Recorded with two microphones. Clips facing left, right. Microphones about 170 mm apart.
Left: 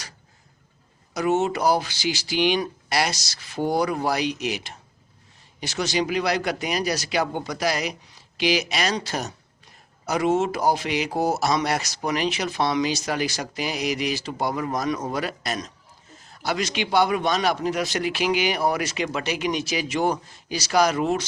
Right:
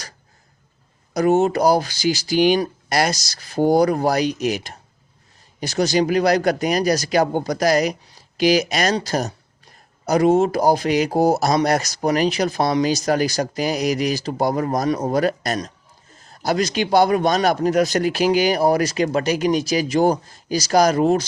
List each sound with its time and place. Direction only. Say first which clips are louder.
1.1 s speech: right 6 dB; 40° right (ahead or behind)